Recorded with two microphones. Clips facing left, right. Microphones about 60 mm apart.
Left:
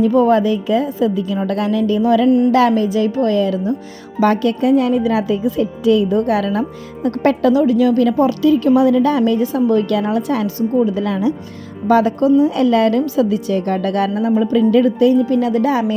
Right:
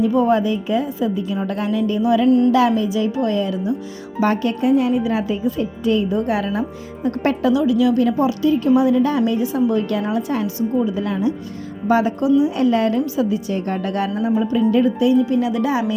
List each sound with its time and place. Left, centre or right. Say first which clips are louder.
0.0 s a woman's voice: left 4 dB; left
7.0 s speech: left 3 dB; centre
7.5 s a woman's voice: left 3 dB; left
7.9 s speech: left 3 dB; left
11.9 s speech: left 4 dB; left
12.5 s a woman's voice: left 4 dB; left
13.0 s a woman's voice: left 4 dB; left
14.5 s speech: left 4 dB; left